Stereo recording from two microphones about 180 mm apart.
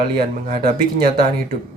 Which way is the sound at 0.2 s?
55° right (ahead or behind).